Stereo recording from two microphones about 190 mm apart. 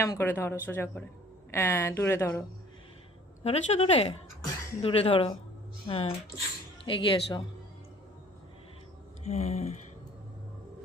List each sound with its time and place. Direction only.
0.0 s a woman's voice: 15° left (ahead or behind)
3.4 s a woman's voice: 35° left (ahead or behind)
9.2 s speech: 35° left (ahead or behind)